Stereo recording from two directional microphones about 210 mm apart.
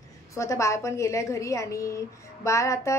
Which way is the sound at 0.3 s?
15° left (ahead or behind).